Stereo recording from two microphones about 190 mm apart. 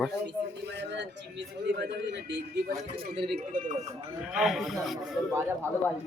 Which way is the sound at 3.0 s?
55° right (ahead or behind).